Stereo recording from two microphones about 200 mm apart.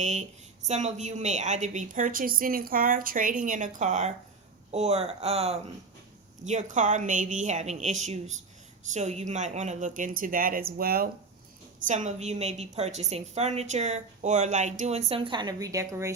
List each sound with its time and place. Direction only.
0.0 s a woman's voice: 35° right (ahead or behind)
11.9 s a woman's voice: 40° right (ahead or behind); by 16.1 s 15° right (ahead or behind)